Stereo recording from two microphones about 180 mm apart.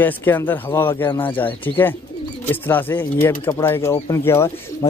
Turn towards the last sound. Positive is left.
turn(degrees=15)  # may be behind; listen again after turning